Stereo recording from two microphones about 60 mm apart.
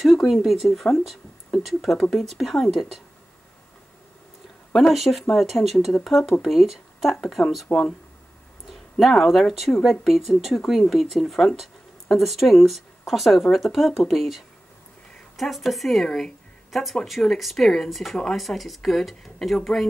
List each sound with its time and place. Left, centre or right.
0.0 s speech: centre
4.7 s speech: centre
7.7 s speech: left
9.0 s speech: centre